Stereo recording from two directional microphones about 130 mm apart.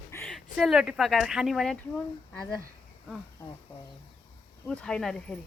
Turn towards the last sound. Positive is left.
turn(degrees=5)  # may be behind; listen again after turning